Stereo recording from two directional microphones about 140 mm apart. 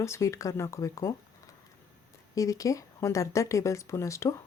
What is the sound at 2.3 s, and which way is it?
Speech, 25° left (ahead or behind).